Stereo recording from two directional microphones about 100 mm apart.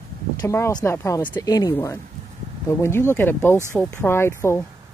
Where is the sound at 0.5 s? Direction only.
30° left (ahead or behind).